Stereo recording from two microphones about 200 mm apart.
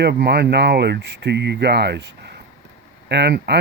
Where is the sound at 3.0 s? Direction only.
55° right (ahead or behind).